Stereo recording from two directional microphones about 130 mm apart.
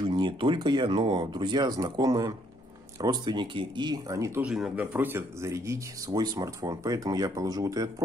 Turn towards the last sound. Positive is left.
turn(degrees=-25)  # may be behind; listen again after turning